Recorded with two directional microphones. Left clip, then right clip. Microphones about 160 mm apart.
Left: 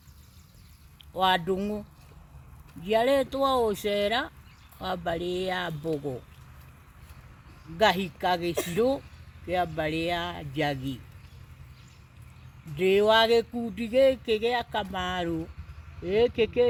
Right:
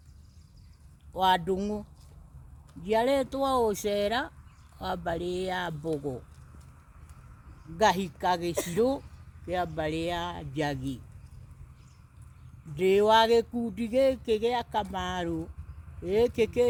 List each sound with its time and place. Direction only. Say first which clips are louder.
1.1 s a man's voice: even; 40° right (ahead or behind)
2.8 s a man's voice: left 2 dB; 40° right (ahead or behind)
7.8 s a man's voice: left 1 dB; 40° right (ahead or behind)
12.7 s a sound: even; 40° right (ahead or behind)
16.0 s a man's voice: left 1 dB; 40° right (ahead or behind)